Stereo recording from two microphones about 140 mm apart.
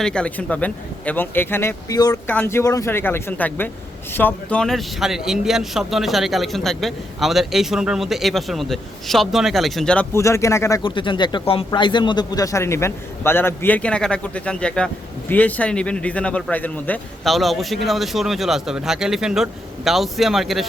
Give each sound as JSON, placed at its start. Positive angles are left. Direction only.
{"t": 0.0, "sound": "a man's voice", "side_deg": 5}
{"t": 10.1, "sound": "speech", "side_deg": 20}
{"t": 10.8, "sound": "a man's voice", "side_deg": 35}
{"t": 17.2, "sound": "a man's voice", "side_deg": 0}